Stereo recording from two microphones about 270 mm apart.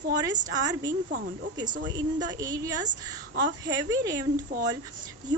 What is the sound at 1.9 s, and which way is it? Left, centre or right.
Speech, centre.